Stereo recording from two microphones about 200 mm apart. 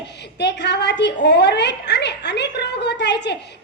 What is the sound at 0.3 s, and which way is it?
A woman's voice, 60° left (ahead or behind).